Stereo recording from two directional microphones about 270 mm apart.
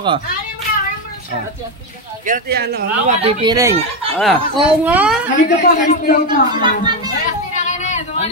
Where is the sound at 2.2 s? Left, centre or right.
Right.